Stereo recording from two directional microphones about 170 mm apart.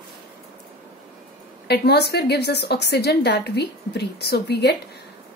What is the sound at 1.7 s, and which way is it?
A woman's voice, 75° left (ahead or behind).